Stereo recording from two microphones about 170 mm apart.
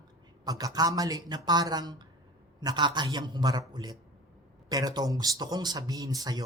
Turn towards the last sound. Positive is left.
turn(degrees=-20)  # may be behind; listen again after turning